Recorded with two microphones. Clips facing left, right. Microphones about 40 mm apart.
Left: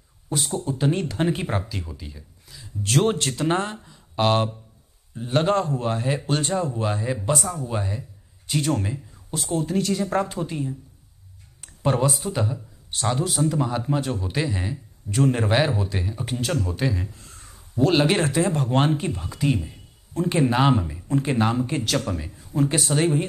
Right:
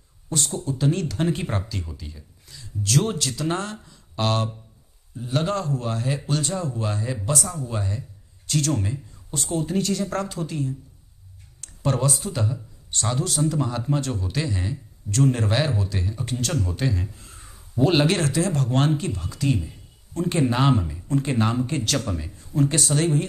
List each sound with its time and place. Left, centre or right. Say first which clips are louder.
0.3 s speech: even; centre
0.7 s a man's voice: even; left
1.3 s speech: left 1 dB; centre
2.8 s a man's voice: left 2 dB; left
5.1 s a man's voice: left 4 dB; left; by 9.9 s centre
9.9 s a man's voice: left 3 dB; centre
11.6 s a sound: left 2 dB; centre
12.2 s a man's voice: left 2 dB; centre
18.0 s speech: left 1 dB; centre